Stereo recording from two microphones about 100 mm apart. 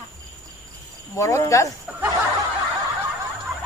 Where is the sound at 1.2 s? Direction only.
30° left (ahead or behind).